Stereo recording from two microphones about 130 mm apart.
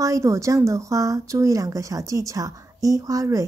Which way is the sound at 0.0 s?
25° right (ahead or behind).